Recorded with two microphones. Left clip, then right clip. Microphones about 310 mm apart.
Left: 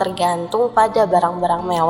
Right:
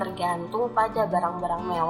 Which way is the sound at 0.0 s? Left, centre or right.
Left.